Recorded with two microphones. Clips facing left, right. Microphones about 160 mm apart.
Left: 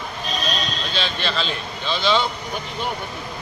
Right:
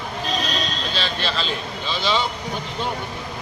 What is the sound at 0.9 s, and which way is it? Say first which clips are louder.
Speech: left 2 dB; 5° right (ahead or behind).